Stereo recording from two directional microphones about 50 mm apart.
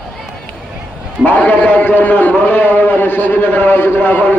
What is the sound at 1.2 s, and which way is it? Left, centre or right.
A man's voice, left.